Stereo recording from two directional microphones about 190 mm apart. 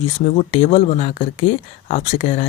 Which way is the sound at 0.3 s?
35° left (ahead or behind).